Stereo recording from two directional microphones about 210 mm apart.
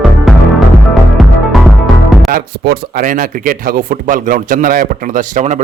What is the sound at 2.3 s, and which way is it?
Speech, 45° right (ahead or behind).